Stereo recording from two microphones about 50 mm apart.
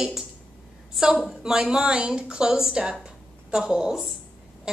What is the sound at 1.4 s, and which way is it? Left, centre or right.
A woman's voice, centre.